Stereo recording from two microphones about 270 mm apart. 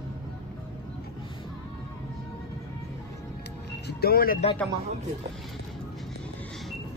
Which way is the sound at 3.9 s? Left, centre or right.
Left.